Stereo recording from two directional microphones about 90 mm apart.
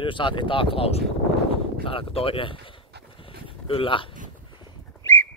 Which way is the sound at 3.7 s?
80° left.